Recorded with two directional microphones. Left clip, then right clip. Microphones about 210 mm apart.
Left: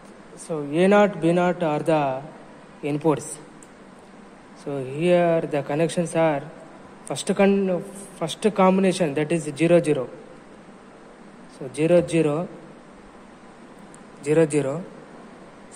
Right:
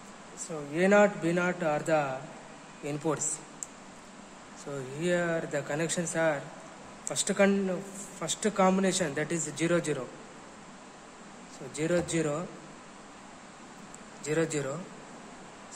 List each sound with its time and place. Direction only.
0.7 s speech: 20° left (ahead or behind)
4.7 s speech: 20° left (ahead or behind)
11.7 s speech: 20° left (ahead or behind)
14.2 s speech: 20° left (ahead or behind)